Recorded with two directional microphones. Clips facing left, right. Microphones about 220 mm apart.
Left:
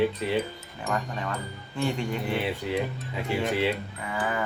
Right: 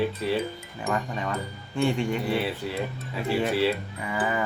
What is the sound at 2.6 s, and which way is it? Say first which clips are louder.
Speech: left 3 dB; 20° left (ahead or behind).